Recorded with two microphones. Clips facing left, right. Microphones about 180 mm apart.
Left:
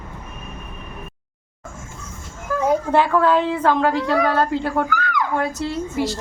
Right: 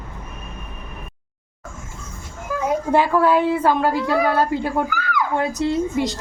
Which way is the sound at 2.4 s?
10° right (ahead or behind).